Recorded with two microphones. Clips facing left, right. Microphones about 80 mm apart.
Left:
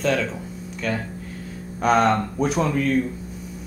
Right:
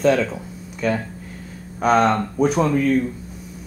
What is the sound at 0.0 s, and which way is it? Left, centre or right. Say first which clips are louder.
Speech: right 5 dB; centre.